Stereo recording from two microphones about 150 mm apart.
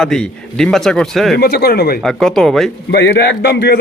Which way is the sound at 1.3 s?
90° left.